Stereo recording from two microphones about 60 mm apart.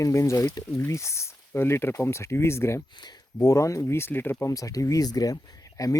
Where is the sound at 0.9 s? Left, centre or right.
Left.